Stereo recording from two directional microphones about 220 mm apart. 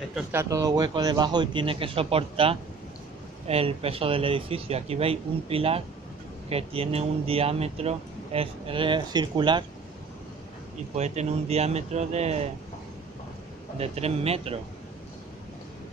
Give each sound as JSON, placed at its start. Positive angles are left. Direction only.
{"t": 0.1, "sound": "speech", "side_deg": -10}
{"t": 11.0, "sound": "speech", "side_deg": -30}
{"t": 13.7, "sound": "speech", "side_deg": -25}